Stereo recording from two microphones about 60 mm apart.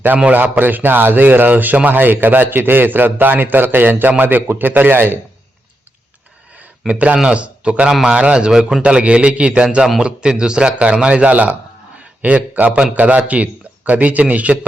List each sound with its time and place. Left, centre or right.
0.3 s a man's voice: right
6.6 s a man's voice: right